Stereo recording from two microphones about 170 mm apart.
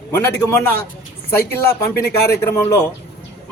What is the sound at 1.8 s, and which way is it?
Speech, 15° left (ahead or behind).